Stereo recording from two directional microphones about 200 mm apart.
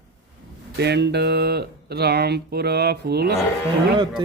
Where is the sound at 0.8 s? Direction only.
55° right (ahead or behind).